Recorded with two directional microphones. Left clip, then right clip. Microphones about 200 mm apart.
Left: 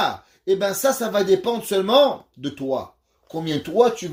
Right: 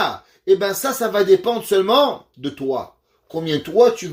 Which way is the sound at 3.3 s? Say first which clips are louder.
Right 3 dB; 45° left (ahead or behind).